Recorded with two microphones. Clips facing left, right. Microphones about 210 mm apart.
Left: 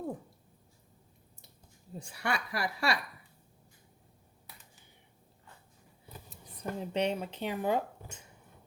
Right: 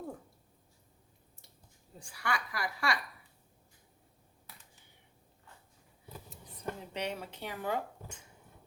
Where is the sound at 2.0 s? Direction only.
25° left (ahead or behind).